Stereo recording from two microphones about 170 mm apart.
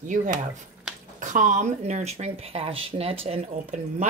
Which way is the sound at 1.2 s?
50° right (ahead or behind).